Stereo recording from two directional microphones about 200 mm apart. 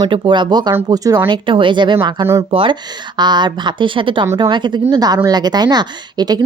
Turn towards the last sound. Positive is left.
turn(degrees=-20)  # may be behind; listen again after turning